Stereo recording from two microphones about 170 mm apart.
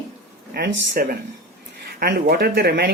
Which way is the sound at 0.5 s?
80° right.